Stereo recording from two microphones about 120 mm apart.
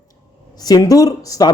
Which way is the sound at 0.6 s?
30° left (ahead or behind).